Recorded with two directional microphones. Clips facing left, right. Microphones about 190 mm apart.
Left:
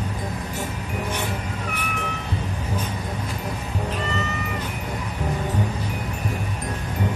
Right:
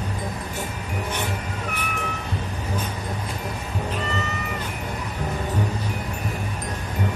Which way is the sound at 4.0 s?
Centre (ahead or behind).